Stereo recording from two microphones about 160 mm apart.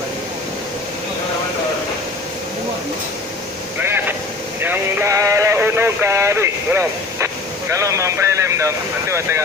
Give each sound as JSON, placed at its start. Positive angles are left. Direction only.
{"t": 3.8, "sound": "vehicle", "side_deg": -15}
{"t": 4.6, "sound": "sheep", "side_deg": -15}
{"t": 7.7, "sound": "speech", "side_deg": -20}